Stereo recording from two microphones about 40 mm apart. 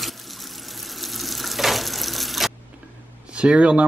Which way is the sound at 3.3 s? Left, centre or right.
Right.